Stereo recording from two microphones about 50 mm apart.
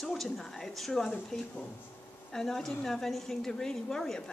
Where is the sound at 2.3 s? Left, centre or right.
Centre.